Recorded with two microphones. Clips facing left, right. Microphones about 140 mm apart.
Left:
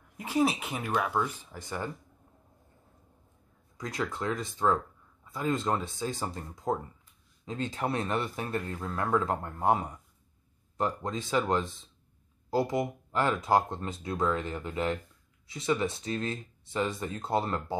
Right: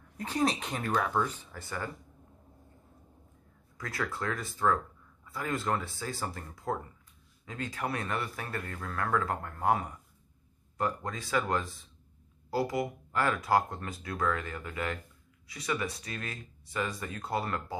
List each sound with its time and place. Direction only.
0.2 s speech: 10° left (ahead or behind)
3.7 s speech: 20° left (ahead or behind)